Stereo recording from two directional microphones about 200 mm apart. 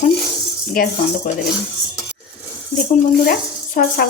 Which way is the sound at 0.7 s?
45° left (ahead or behind).